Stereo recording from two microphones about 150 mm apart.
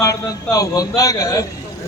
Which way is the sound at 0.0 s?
20° left (ahead or behind).